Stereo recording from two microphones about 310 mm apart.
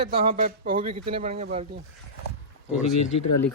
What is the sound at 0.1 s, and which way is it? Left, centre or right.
Speech, right.